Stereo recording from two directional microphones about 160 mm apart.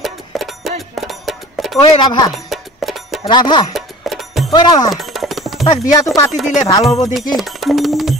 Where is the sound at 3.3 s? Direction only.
30° left (ahead or behind).